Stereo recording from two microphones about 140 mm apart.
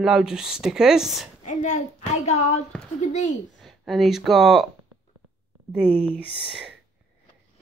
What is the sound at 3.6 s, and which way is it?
Speech, centre (ahead or behind).